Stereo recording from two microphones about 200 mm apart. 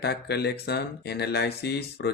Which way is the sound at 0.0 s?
55° left (ahead or behind).